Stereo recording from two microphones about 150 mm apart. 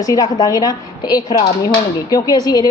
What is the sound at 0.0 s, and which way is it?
A woman's voice, 25° left (ahead or behind).